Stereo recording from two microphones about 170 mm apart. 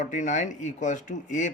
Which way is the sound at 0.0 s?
45° left (ahead or behind).